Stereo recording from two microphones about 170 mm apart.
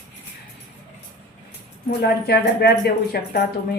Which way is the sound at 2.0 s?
75° left (ahead or behind).